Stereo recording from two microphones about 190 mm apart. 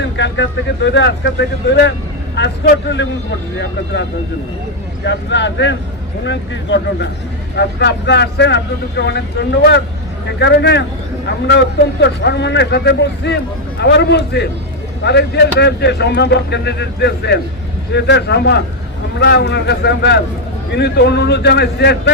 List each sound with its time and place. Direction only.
0.2 s speech: 70° left (ahead or behind)
5.0 s a man's voice: 65° left (ahead or behind)